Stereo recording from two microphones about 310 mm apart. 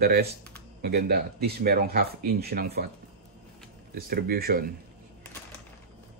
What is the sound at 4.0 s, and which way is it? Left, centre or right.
Speech, right.